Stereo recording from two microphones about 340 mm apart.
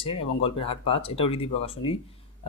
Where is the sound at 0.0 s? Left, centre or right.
Centre.